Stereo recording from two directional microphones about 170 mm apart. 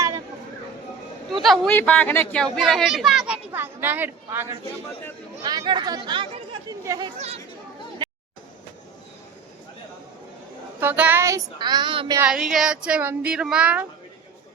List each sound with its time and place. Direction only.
1.3 s speech: centre (ahead or behind)
5.5 s female singing: 25° right (ahead or behind)
10.8 s female singing: 10° right (ahead or behind); by 12.2 s 25° right (ahead or behind)
12.2 s speech: 5° right (ahead or behind)